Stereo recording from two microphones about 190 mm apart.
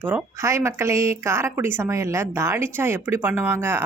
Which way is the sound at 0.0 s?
10° right (ahead or behind).